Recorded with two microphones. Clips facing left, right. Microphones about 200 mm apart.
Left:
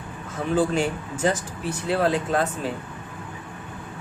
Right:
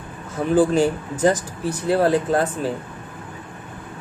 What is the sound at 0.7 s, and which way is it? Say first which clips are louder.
Speech: right 6 dB; 35° right (ahead or behind).